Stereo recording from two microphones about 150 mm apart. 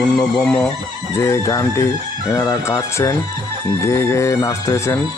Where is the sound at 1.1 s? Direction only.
20° left (ahead or behind).